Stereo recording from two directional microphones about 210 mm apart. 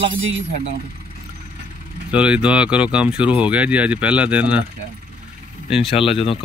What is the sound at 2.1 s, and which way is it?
Speech, 5° right (ahead or behind).